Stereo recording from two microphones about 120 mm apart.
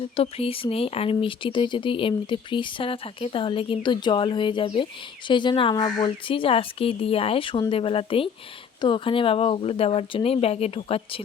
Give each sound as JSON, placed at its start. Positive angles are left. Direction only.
{"t": 0.2, "sound": "speech", "side_deg": 55}